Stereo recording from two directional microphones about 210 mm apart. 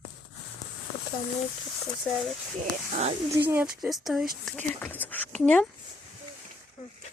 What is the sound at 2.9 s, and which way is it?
Speech, 30° right (ahead or behind).